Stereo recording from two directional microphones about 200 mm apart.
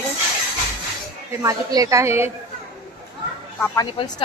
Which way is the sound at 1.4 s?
15° right (ahead or behind).